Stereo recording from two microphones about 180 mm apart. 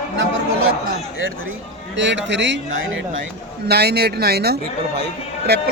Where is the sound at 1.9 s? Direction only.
85° right; by 5.6 s 65° right (ahead or behind).